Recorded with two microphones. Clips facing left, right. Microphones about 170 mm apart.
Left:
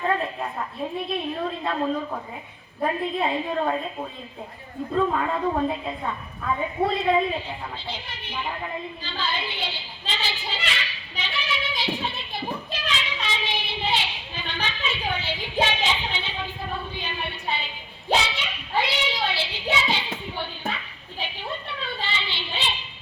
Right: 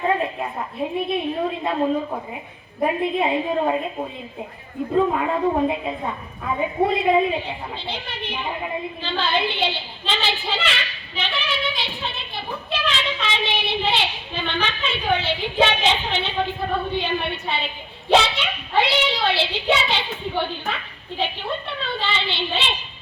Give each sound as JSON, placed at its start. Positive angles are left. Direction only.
{"t": 0.1, "sound": "a sound", "side_deg": -15}
{"t": 1.6, "sound": "a man's voice", "side_deg": -20}
{"t": 4.9, "sound": "a woman's voice", "side_deg": -15}
{"t": 7.4, "sound": "a child's voice", "side_deg": -65}
{"t": 12.4, "sound": "child singing", "side_deg": -70}
{"t": 15.1, "sound": "a child's voice", "side_deg": -70}